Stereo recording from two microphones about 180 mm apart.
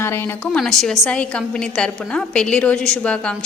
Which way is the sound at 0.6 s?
Centre (ahead or behind).